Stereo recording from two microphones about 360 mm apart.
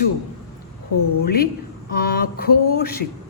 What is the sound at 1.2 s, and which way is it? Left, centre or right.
Speech, left.